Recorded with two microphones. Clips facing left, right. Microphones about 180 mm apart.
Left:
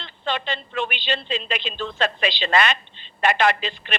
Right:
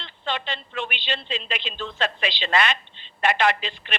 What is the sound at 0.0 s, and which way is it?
A woman's voice, 45° left (ahead or behind).